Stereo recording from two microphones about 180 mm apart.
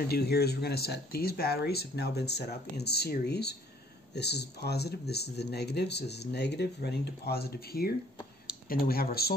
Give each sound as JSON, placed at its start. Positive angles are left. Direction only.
{"t": 0.1, "sound": "speech", "side_deg": 60}